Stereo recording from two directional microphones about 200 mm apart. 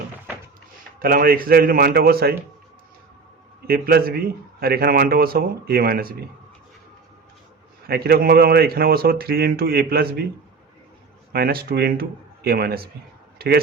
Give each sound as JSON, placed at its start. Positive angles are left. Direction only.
{"t": 0.9, "sound": "speech", "side_deg": -45}
{"t": 3.7, "sound": "speech", "side_deg": -50}
{"t": 7.9, "sound": "speech", "side_deg": -50}
{"t": 11.3, "sound": "speech", "side_deg": -50}